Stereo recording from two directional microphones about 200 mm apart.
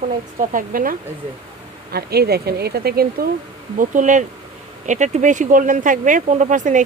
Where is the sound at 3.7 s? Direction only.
40° right (ahead or behind).